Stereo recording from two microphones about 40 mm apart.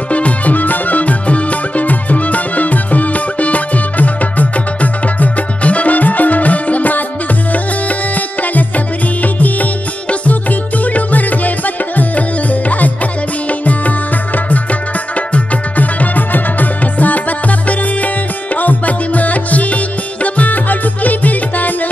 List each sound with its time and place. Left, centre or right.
0.1 s music: left